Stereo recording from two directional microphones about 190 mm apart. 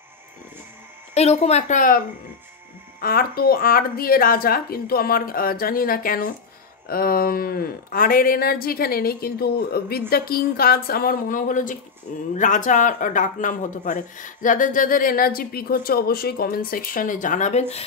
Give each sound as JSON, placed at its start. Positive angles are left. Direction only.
{"t": 1.1, "sound": "speech", "side_deg": 35}